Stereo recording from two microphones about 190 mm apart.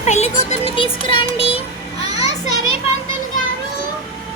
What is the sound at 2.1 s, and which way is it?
Children playing, 20° right (ahead or behind).